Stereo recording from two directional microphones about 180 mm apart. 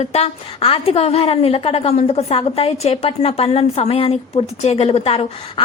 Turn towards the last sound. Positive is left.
turn(degrees=30)  # may be behind; listen again after turning